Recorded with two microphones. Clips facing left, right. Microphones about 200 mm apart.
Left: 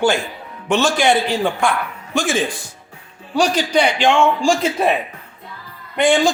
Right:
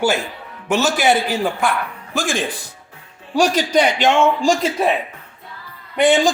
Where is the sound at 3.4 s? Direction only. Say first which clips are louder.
Right 1 dB; 45° right (ahead or behind).